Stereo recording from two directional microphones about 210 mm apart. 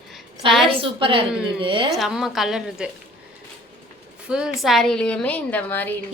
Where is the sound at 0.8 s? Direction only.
25° right (ahead or behind).